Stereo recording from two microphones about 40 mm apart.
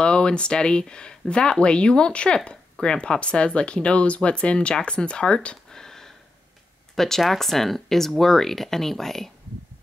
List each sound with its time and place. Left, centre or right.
0.0 s speech: left
5.7 s sniff: centre
7.0 s speech: centre